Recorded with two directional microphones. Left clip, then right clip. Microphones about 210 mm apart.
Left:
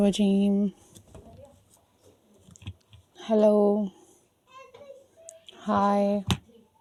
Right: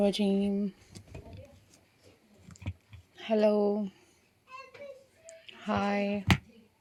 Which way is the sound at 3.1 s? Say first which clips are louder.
Left 5 dB; 40° left (ahead or behind).